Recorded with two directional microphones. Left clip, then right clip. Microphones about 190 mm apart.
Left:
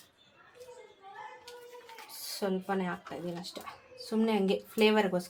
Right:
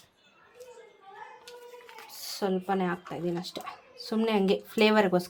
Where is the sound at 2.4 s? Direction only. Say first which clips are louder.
Right 4 dB; 45° right (ahead or behind).